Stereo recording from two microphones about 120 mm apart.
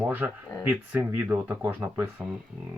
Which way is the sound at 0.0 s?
15° right (ahead or behind).